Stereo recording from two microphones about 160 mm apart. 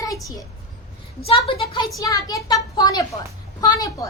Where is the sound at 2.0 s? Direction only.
20° left (ahead or behind).